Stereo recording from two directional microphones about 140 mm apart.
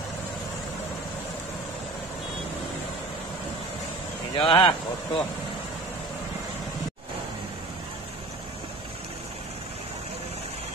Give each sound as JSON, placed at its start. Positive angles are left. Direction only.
{"t": 4.4, "sound": "speech", "side_deg": 35}